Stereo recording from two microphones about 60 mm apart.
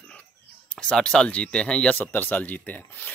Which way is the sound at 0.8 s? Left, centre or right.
Centre.